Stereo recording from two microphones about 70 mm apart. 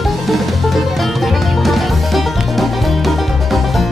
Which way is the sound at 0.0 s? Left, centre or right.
Centre.